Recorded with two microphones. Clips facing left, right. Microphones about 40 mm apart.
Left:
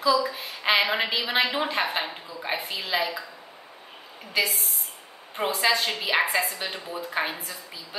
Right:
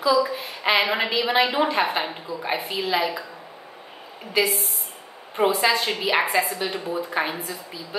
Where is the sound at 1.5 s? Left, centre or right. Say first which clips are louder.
Right 5 dB; centre.